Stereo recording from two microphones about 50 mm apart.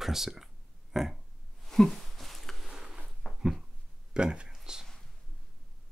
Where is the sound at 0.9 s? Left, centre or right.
Centre.